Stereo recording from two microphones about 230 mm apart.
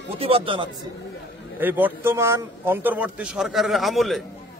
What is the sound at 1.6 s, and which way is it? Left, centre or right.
A man's voice, centre.